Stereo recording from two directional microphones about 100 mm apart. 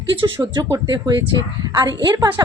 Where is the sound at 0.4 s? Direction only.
40° right (ahead or behind).